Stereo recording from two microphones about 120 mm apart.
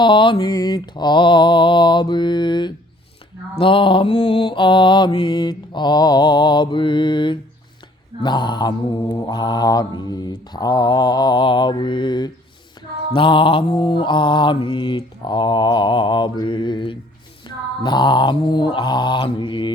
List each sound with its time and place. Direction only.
0.0 s mantra: 45° left (ahead or behind)
17.5 s a sound: 40° left (ahead or behind)
17.8 s mantra: 40° left (ahead or behind)